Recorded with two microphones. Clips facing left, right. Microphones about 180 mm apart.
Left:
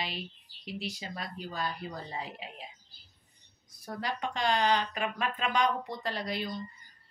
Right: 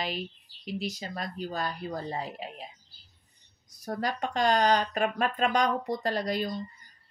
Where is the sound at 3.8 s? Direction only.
45° right (ahead or behind).